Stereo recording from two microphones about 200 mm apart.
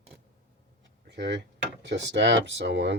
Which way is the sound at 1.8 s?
60° right (ahead or behind).